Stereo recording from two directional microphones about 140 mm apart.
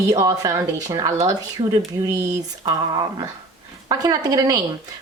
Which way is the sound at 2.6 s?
30° right (ahead or behind).